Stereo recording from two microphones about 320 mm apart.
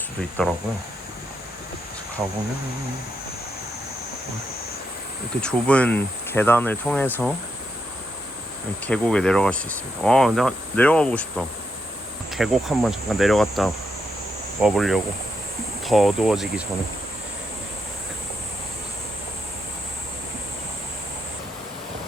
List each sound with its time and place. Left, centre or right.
0.2 s speech: centre
5.4 s speech: centre
8.9 s speech: centre